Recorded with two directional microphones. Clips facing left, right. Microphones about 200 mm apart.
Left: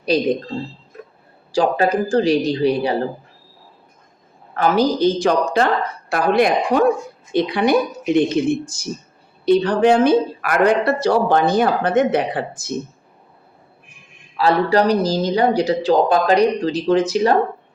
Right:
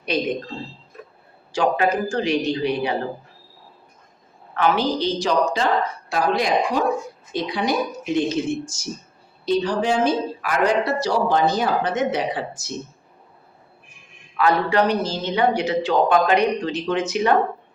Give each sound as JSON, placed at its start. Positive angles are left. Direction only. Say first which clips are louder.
{"t": 0.0, "sound": "speech", "louder": "left 6 dB", "side_deg": 35}
{"t": 1.5, "sound": "speech", "louder": "left 3 dB", "side_deg": 35}
{"t": 4.5, "sound": "a woman's voice", "louder": "left 4 dB", "side_deg": 40}
{"t": 14.3, "sound": "speech", "louder": "left 3 dB", "side_deg": 35}